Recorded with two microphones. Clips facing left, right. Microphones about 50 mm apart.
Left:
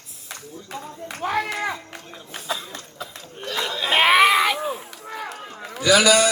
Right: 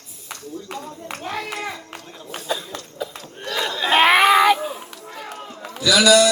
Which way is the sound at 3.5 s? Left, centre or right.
Centre.